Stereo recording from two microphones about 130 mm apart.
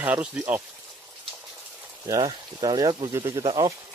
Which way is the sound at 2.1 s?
35° right (ahead or behind).